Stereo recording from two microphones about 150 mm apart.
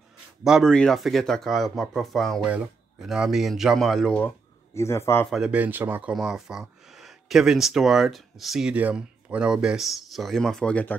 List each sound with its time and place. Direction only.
0.4 s speech: centre (ahead or behind)
4.7 s a man's voice: 20° left (ahead or behind)
5.3 s speech: 5° right (ahead or behind)